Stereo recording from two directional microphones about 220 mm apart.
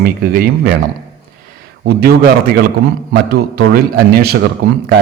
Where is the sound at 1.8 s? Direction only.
45° right (ahead or behind).